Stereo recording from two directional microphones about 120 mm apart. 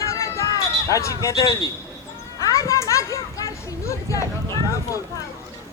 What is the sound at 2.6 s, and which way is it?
Children playing, 25° left (ahead or behind).